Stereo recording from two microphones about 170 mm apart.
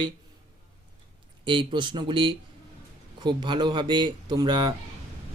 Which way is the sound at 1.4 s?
30° right (ahead or behind).